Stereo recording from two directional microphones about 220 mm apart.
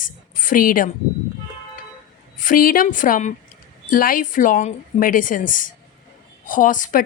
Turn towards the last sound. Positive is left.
turn(degrees=35)  # may be behind; listen again after turning